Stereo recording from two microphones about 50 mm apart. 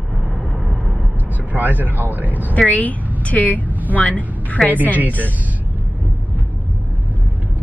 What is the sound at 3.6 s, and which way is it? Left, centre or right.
Vehicle, right.